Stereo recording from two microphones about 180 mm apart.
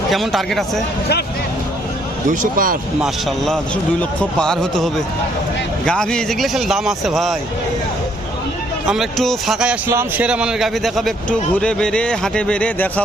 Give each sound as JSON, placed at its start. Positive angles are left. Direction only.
{"t": 0.1, "sound": "speech", "side_deg": 0}
{"t": 2.3, "sound": "speech", "side_deg": -50}
{"t": 3.0, "sound": "speech", "side_deg": 0}
{"t": 8.9, "sound": "speech", "side_deg": 0}